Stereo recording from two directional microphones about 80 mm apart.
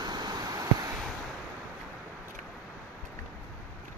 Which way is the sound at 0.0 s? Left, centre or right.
Right.